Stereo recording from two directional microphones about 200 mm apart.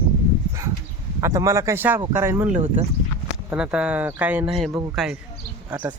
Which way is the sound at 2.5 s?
35° right (ahead or behind).